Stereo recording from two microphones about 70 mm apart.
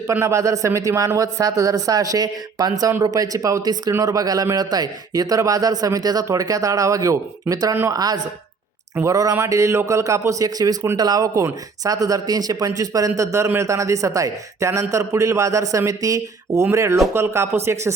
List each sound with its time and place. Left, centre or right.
0.2 s a man's voice: right
4.5 s a man's voice: right
7.9 s speech: right
9.0 s speech: right
10.9 s a man's voice: right